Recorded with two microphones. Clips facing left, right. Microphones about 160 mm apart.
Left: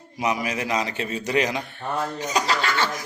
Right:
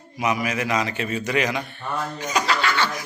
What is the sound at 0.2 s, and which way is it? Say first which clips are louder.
A man's voice: right 1 dB; 35° left (ahead or behind).